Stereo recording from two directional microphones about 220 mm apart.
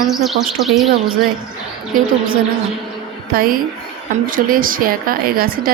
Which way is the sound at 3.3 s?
40° right (ahead or behind).